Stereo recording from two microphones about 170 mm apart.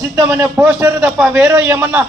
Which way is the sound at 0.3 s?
10° right (ahead or behind).